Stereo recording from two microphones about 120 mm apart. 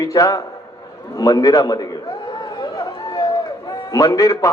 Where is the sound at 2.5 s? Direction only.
30° left (ahead or behind).